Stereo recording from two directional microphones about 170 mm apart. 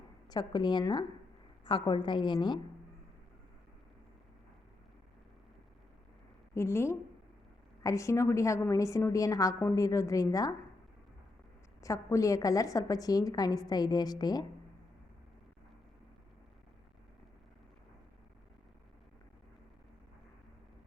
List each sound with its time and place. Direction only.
0.3 s a woman's voice: 25° left (ahead or behind)
6.5 s a woman's voice: 15° left (ahead or behind)
11.8 s a woman's voice: 20° left (ahead or behind)